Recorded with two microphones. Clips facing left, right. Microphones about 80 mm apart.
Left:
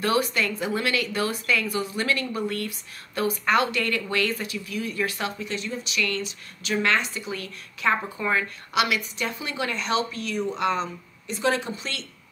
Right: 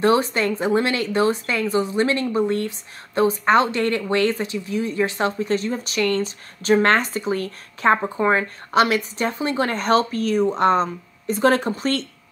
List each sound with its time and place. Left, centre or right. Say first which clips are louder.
0.0 s a woman's voice: right 6 dB; right